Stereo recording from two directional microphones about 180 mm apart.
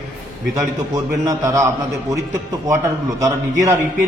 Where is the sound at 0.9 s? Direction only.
20° right (ahead or behind).